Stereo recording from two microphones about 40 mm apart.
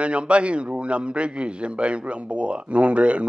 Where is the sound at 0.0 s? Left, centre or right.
Right.